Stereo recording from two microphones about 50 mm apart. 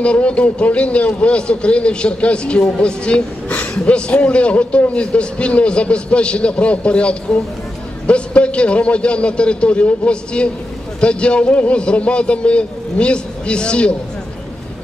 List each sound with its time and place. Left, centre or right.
0.0 s a man's voice: left